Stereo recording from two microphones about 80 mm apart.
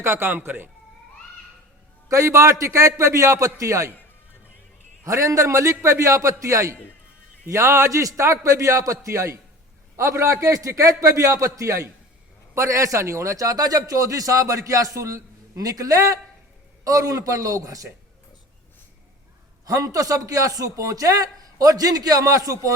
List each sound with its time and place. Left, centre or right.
0.0 s speech: right
2.0 s a man's voice: right
5.0 s a man's voice: right
19.6 s a man's voice: right